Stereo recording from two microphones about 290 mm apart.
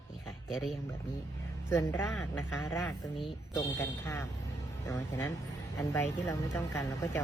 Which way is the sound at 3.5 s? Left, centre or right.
Centre.